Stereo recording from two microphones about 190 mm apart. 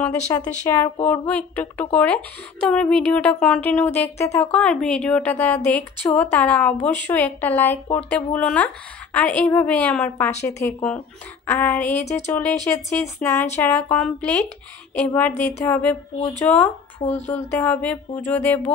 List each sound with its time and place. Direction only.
0.3 s speech: 20° left (ahead or behind)
12.0 s speech: 35° left (ahead or behind)
12.3 s speech: 10° left (ahead or behind)